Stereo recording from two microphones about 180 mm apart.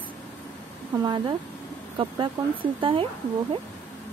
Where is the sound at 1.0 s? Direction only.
25° right (ahead or behind).